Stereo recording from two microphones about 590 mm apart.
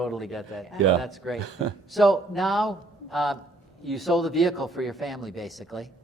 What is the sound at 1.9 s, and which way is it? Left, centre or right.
Speech, centre.